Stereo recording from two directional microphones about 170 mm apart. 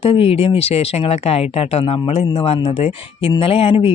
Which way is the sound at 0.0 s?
35° left (ahead or behind).